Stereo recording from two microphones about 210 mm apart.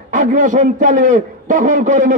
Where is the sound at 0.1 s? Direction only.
40° right (ahead or behind).